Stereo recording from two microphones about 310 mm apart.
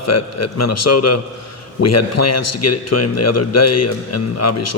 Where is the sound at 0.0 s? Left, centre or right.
Left.